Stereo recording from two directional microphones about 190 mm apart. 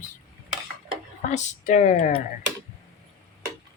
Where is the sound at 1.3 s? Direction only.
40° left (ahead or behind).